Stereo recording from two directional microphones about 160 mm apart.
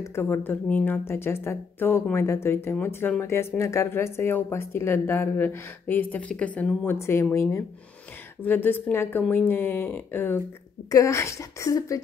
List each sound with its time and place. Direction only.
0.0 s speech: 15° left (ahead or behind)